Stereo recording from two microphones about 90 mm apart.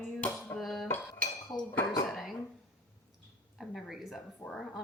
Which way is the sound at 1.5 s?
50° left (ahead or behind).